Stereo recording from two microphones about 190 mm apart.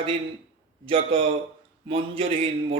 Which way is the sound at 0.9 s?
30° right (ahead or behind).